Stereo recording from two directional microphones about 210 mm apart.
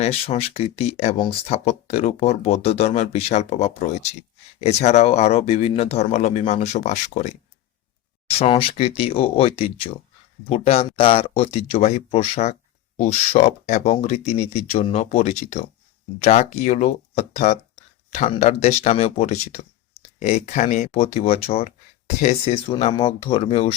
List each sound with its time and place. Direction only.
0.0 s speech: 30° left (ahead or behind)
8.3 s speech: 25° left (ahead or behind)